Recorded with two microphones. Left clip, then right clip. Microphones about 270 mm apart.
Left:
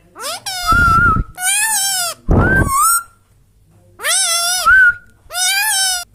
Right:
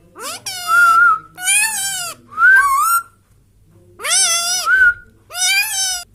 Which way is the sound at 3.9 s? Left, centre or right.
Centre.